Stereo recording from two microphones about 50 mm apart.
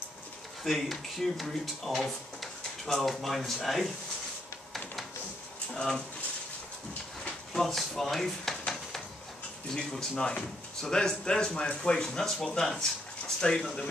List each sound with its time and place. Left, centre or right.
0.7 s speech: centre
5.8 s speech: centre
7.2 s drawer open or close: centre
9.8 s speech: centre